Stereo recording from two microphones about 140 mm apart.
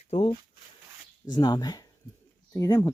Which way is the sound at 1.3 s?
30° left (ahead or behind).